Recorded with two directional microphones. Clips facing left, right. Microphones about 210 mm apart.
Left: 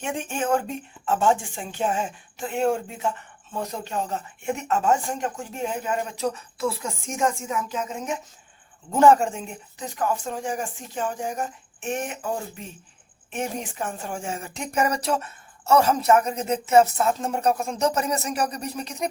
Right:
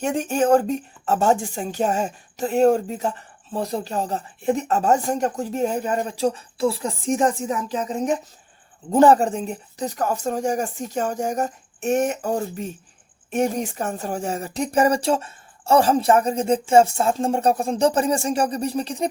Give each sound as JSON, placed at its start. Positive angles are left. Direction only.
{"t": 0.0, "sound": "speech", "side_deg": -40}